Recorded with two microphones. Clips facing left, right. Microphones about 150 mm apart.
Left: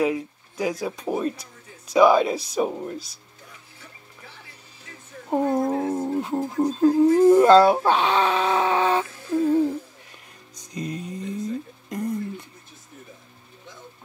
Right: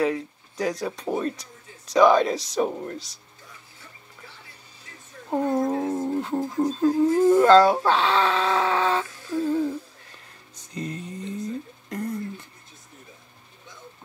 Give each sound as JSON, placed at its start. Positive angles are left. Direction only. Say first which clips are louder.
{"t": 0.0, "sound": "speech", "louder": "left 1 dB", "side_deg": 10}
{"t": 5.3, "sound": "speech", "louder": "left 2 dB", "side_deg": 10}
{"t": 5.9, "sound": "music", "louder": "left 1 dB", "side_deg": 10}
{"t": 6.6, "sound": "speech", "louder": "left 3 dB", "side_deg": 15}
{"t": 10.5, "sound": "music", "louder": "left 2 dB", "side_deg": 15}
{"t": 11.9, "sound": "a sound", "louder": "left 2 dB", "side_deg": 15}